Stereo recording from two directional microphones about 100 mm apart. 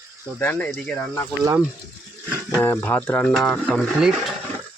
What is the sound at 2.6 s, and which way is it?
Speech, 20° left (ahead or behind).